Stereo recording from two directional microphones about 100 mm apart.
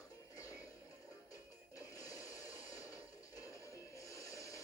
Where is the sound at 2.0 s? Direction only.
35° left (ahead or behind).